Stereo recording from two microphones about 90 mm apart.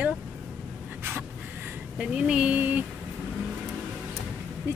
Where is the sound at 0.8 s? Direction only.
20° right (ahead or behind).